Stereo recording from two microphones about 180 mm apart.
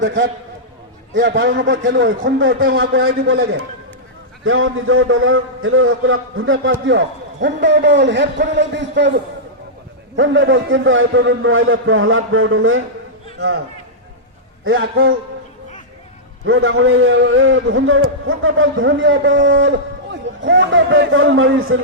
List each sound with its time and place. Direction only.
0.0 s a man's voice: 90° right
1.3 s a man's voice: 75° right (ahead or behind)
4.4 s a man's voice: 90° right
10.2 s a man's voice: 90° right
14.7 s a man's voice: 90° right
16.5 s a man's voice: 75° right (ahead or behind); by 21.8 s 90° right